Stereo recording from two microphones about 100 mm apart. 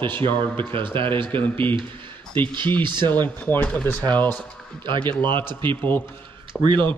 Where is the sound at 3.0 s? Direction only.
20° left (ahead or behind).